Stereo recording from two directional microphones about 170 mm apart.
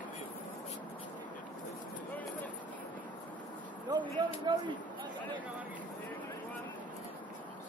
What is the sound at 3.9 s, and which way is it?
Speech, 25° right (ahead or behind).